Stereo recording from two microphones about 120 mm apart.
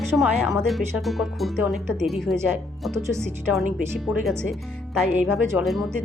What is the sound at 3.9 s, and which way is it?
Speech, centre (ahead or behind).